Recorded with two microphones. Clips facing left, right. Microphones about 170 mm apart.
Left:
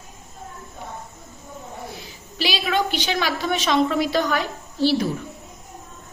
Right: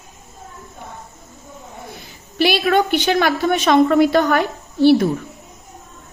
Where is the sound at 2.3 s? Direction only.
55° right (ahead or behind).